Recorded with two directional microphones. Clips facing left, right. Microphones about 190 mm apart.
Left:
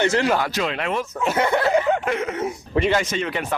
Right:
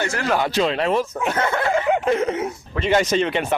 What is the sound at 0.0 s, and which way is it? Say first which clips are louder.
Speech: left 5 dB; 20° left (ahead or behind).